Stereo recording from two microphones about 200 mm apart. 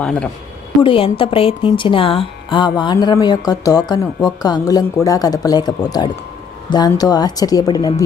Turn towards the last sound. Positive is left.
turn(degrees=20)  # may be behind; listen again after turning